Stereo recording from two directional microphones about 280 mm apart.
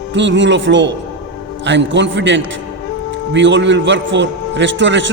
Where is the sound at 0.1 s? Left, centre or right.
Right.